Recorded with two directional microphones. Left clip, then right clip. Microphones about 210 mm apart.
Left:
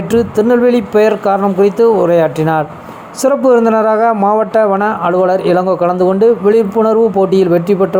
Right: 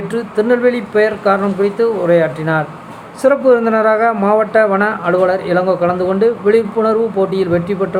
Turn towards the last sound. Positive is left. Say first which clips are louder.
# left 5 dB
turn(degrees=25)  # may be behind; listen again after turning